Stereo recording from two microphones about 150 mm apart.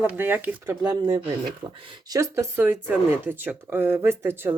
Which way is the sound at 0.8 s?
25° right (ahead or behind).